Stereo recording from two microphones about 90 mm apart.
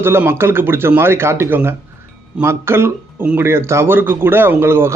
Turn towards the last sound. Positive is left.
turn(degrees=-25)  # may be behind; listen again after turning